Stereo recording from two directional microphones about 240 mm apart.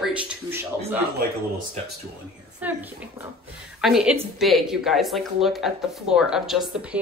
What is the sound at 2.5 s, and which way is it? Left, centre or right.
A woman's voice, centre.